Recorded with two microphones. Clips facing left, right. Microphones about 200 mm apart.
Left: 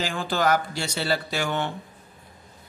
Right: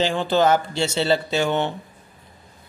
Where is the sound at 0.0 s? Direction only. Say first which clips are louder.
Right 6 dB; 25° right (ahead or behind).